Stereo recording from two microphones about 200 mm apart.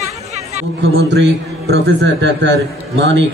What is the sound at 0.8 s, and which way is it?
A man's voice, 60° right (ahead or behind).